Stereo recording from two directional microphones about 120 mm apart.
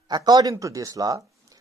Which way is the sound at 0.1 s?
35° right (ahead or behind).